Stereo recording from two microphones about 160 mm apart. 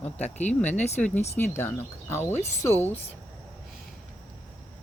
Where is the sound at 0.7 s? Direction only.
45° left (ahead or behind).